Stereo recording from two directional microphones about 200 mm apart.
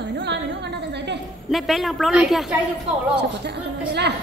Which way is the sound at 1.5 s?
Centre (ahead or behind).